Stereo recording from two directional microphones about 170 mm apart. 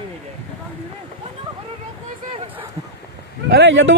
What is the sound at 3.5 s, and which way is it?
Speech, 90° right.